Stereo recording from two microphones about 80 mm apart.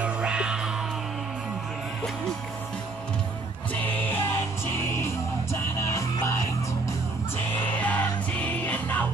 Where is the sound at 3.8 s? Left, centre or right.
Left.